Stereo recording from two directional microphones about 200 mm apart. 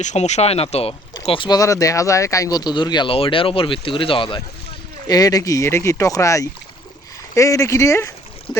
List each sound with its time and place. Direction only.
0.0 s speech: 35° left (ahead or behind); by 8.1 s 15° left (ahead or behind)